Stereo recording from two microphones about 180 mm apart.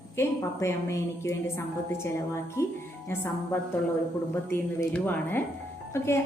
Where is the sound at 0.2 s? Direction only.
15° left (ahead or behind).